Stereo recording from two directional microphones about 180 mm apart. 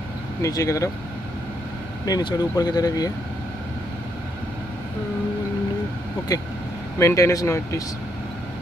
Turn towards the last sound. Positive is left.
turn(degrees=15)  # may be behind; listen again after turning